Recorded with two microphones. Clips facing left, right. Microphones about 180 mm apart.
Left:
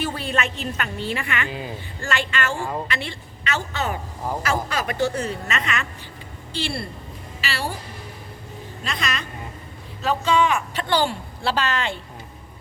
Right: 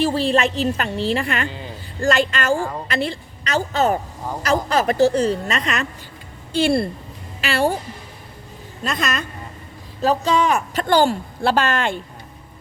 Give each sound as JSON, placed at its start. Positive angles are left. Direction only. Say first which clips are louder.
{"t": 0.0, "sound": "a woman's voice", "louder": "right 8 dB", "side_deg": -30}
{"t": 6.6, "sound": "speech", "louder": "right 11 dB", "side_deg": -50}
{"t": 8.8, "sound": "speech", "louder": "right 5 dB", "side_deg": -45}